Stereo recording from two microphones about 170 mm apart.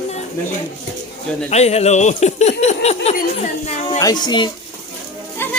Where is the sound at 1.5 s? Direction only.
40° left (ahead or behind).